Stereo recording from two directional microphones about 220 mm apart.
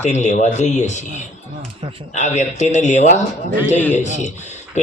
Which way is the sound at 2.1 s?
30° left (ahead or behind).